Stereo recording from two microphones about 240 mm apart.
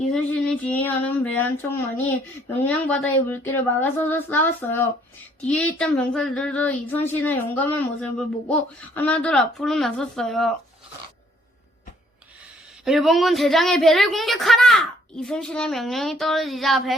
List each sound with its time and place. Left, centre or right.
0.1 s a woman's voice: centre
9.0 s a woman's voice: centre
12.8 s a woman's voice: centre